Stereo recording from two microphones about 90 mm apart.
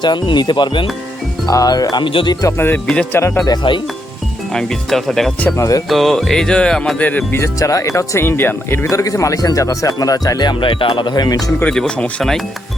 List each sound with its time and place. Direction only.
0.0 s speech: 55° left (ahead or behind)
1.5 s speech: 40° left (ahead or behind)
2.0 s speech: 65° left (ahead or behind)
2.6 s speech: 20° left (ahead or behind)
2.8 s speech: 10° left (ahead or behind)
3.4 s speech: 55° left (ahead or behind)
4.5 s music: 5° left (ahead or behind)
5.5 s speech: 35° left (ahead or behind)
5.9 s music: centre (ahead or behind)
7.3 s speech: 30° left (ahead or behind)
8.9 s speech: 40° left (ahead or behind); by 11.1 s 65° left (ahead or behind)
11.1 s speech: 45° left (ahead or behind)
11.6 s speech: 10° left (ahead or behind)